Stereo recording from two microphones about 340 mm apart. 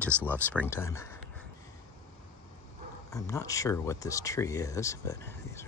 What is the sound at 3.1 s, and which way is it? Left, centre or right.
Speech, centre.